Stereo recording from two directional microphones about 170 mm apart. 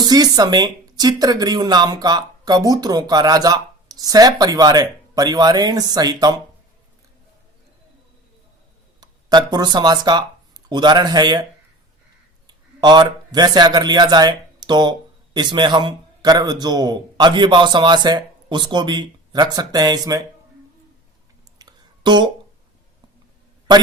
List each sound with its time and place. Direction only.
0.0 s speech: 25° right (ahead or behind)
9.0 s speech: 25° right (ahead or behind)
12.5 s a man's voice: 25° right (ahead or behind)
21.6 s a sound: 25° right (ahead or behind)